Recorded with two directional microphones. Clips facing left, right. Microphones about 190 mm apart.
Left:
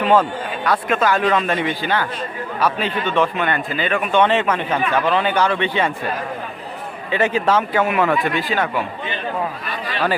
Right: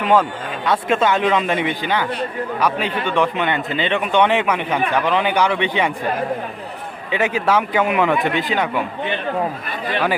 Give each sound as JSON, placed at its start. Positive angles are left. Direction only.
{"t": 0.0, "sound": "speech", "side_deg": -10}
{"t": 0.6, "sound": "a man's voice", "side_deg": -25}
{"t": 7.1, "sound": "a man's voice", "side_deg": -10}